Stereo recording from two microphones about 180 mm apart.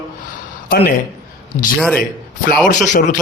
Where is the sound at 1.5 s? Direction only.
40° left (ahead or behind).